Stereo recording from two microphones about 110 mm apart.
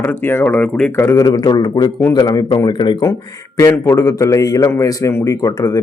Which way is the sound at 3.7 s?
30° left (ahead or behind).